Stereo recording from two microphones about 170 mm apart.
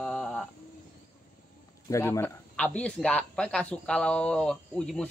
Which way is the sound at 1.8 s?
15° left (ahead or behind).